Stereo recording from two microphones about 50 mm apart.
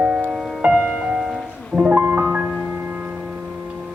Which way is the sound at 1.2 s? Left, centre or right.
Centre.